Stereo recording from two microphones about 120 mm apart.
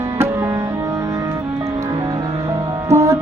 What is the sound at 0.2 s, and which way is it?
Music, 20° right (ahead or behind).